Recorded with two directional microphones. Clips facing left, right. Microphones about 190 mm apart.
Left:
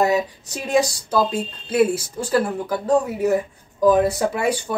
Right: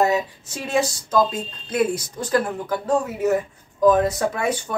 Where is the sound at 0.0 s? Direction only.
35° left (ahead or behind).